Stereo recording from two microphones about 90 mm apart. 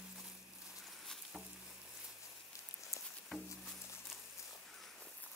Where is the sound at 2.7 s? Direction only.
35° left (ahead or behind).